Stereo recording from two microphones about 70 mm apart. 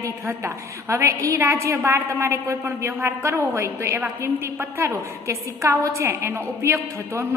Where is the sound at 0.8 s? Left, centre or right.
Right.